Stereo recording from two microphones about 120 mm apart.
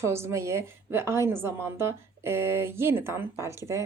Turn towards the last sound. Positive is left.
turn(degrees=-25)  # may be behind; listen again after turning